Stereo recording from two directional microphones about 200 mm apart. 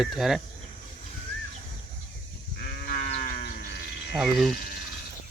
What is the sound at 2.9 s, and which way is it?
Livestock, 50° left (ahead or behind).